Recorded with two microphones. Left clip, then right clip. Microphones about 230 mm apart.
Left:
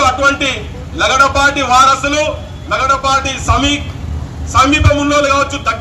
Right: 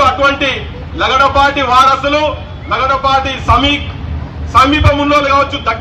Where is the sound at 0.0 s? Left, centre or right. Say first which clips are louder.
Right 1 dB; left.